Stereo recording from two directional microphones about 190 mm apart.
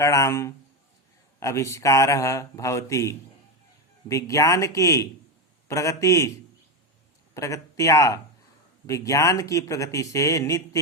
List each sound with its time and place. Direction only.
0.0 s speech: 15° left (ahead or behind)
7.3 s speech: 15° left (ahead or behind)